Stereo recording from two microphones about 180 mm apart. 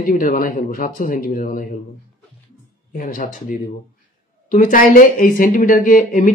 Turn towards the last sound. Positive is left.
turn(degrees=50)  # may be behind; listen again after turning